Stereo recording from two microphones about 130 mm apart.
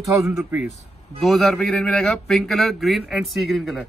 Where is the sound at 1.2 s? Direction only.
Centre (ahead or behind).